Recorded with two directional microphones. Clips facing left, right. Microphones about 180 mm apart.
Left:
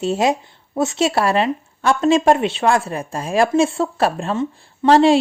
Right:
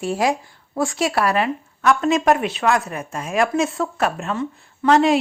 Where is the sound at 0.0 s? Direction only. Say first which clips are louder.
Left 3 dB; 25° left (ahead or behind).